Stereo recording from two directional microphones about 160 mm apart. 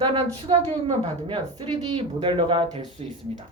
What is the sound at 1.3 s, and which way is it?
Speech, 35° right (ahead or behind).